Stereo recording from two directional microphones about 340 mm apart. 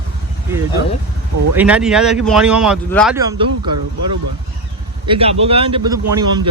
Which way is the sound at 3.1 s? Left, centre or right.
Centre.